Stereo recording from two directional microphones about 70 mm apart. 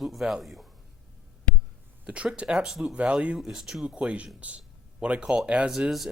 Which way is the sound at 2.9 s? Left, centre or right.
Centre.